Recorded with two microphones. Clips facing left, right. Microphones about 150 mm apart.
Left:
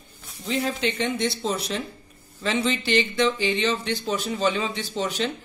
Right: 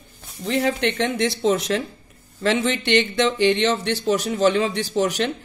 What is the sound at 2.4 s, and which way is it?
Speech, 70° right (ahead or behind).